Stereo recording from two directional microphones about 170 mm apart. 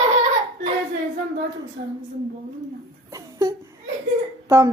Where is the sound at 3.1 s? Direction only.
20° right (ahead or behind).